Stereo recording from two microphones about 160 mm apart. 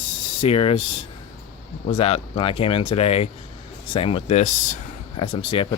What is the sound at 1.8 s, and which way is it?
Speech, 35° left (ahead or behind).